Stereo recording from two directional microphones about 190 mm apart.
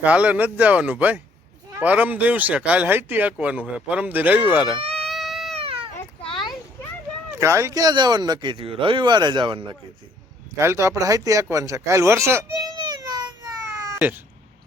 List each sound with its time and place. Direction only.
0.0 s speech: 5° right (ahead or behind)
4.8 s a sound: 30° right (ahead or behind)
5.0 s cat: centre (ahead or behind)
5.5 s cat: 30° right (ahead or behind)
6.2 s a sound: 25° left (ahead or behind)
7.3 s speech: 15° right (ahead or behind)
10.6 s speech: 15° right (ahead or behind)